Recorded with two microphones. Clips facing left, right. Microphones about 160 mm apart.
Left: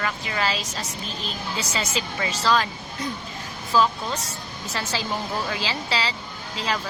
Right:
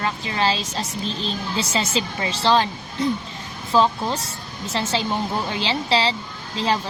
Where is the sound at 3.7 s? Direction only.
30° right (ahead or behind).